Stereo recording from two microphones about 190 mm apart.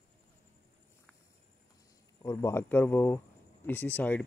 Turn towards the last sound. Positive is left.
turn(degrees=10)  # may be behind; listen again after turning